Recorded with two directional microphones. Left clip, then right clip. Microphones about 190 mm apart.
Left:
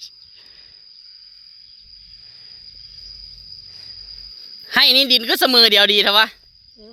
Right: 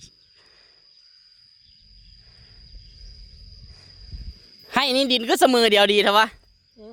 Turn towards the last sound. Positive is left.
turn(degrees=-10)  # may be behind; listen again after turning